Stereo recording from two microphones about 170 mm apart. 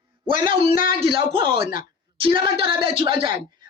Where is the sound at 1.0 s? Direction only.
30° right (ahead or behind).